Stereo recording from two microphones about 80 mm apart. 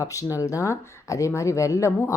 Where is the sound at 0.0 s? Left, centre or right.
Left.